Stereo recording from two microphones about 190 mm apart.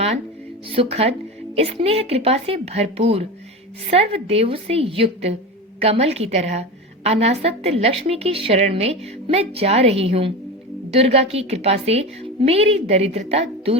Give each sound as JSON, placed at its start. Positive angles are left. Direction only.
{"t": 0.7, "sound": "a woman's voice", "side_deg": -30}